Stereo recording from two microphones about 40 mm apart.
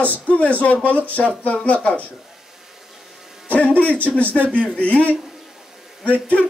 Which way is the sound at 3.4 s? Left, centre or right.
Left.